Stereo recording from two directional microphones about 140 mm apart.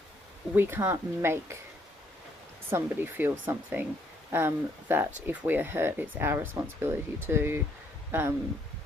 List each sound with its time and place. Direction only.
0.5 s speech: 15° right (ahead or behind)
2.6 s speech: 15° right (ahead or behind)